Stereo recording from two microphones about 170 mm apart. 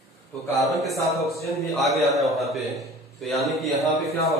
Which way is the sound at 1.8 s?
Centre (ahead or behind).